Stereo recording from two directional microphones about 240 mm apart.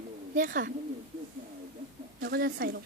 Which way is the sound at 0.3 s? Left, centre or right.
Right.